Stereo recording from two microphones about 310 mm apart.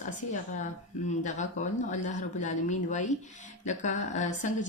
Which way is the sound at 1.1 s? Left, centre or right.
Left.